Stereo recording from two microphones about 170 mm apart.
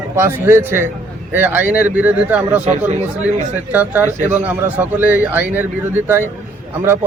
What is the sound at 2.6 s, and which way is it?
Speech, 40° right (ahead or behind).